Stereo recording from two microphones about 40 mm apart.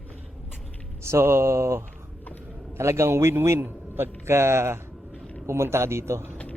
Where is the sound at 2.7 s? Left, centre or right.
Right.